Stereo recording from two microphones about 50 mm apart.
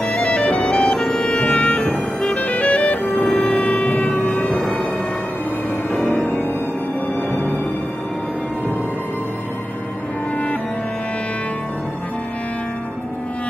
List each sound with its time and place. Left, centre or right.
0.0 s music: left
3.2 s music: centre
3.4 s a sound: left
4.4 s music: centre